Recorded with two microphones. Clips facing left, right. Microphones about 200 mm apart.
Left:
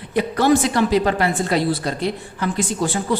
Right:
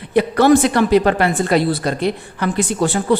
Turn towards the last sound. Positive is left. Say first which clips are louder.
# right 5 dB
turn(degrees=-65)  # may be behind; listen again after turning